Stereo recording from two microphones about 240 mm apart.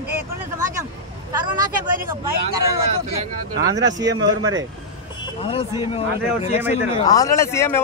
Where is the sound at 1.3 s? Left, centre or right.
Centre.